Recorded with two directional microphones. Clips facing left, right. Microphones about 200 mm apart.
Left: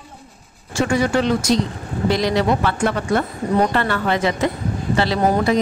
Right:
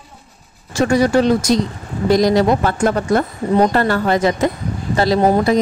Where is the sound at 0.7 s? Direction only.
40° right (ahead or behind).